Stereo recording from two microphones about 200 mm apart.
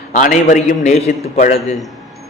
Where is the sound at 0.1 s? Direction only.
40° left (ahead or behind).